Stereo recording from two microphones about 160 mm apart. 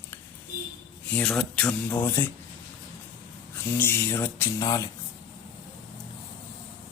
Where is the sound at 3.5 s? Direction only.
15° left (ahead or behind).